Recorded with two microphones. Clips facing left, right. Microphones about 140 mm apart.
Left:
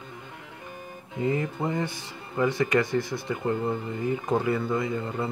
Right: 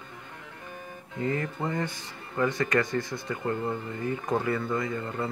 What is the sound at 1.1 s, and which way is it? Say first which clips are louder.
Speech: left 3 dB; 15° left (ahead or behind).